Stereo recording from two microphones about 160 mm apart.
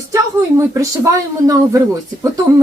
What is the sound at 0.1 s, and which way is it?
Speech, 20° right (ahead or behind).